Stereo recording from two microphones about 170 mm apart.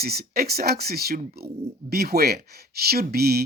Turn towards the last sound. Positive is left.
turn(degrees=-65)  # may be behind; listen again after turning